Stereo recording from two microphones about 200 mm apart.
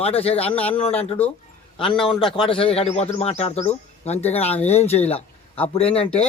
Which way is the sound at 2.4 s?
25° left (ahead or behind).